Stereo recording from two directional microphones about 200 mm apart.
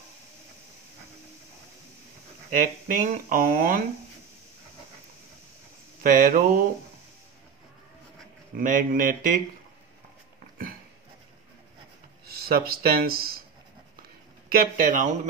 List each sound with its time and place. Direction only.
2.5 s speech: 45° right (ahead or behind)
6.0 s speech: 40° right (ahead or behind)
8.5 s speech: 40° right (ahead or behind)
12.3 s speech: 50° right (ahead or behind)
14.5 s speech: 45° right (ahead or behind)